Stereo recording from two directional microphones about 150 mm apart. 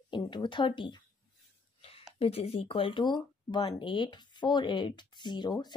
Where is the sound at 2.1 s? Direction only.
40° left (ahead or behind).